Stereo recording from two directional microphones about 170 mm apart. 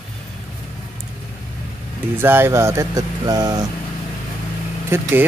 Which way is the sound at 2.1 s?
15° right (ahead or behind).